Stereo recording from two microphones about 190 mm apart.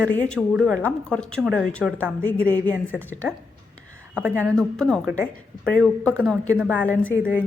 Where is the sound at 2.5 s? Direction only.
10° left (ahead or behind).